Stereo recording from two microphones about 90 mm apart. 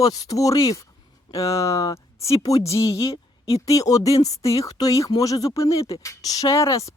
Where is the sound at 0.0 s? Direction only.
45° left (ahead or behind).